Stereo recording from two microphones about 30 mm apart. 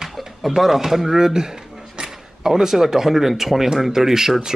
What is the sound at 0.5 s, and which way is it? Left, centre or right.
Speech, centre.